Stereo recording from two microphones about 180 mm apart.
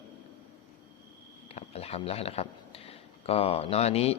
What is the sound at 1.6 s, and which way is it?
Speech, 35° left (ahead or behind).